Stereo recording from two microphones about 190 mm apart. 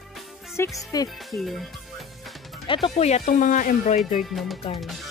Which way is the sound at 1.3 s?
Centre (ahead or behind).